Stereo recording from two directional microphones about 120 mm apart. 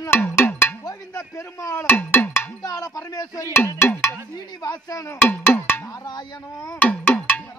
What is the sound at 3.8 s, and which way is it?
Music, 15° left (ahead or behind).